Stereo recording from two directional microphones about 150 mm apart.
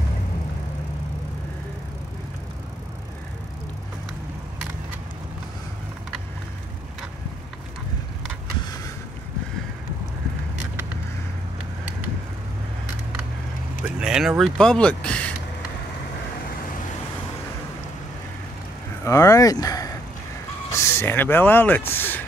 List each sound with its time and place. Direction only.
13.8 s speech: 5° right (ahead or behind)
19.0 s speech: 20° left (ahead or behind)